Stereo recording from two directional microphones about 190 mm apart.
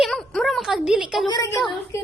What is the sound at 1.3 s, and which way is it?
Speech, 20° left (ahead or behind).